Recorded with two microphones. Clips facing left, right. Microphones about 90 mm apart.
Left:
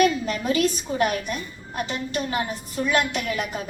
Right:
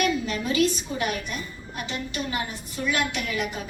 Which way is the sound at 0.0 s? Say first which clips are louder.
Left 4 dB; 40° left (ahead or behind).